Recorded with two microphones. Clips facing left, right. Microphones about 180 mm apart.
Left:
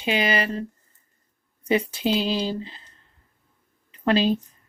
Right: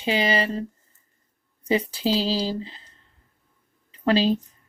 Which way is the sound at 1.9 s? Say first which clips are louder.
Even; 30° right (ahead or behind).